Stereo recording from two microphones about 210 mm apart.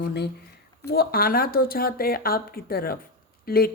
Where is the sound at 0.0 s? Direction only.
50° left (ahead or behind).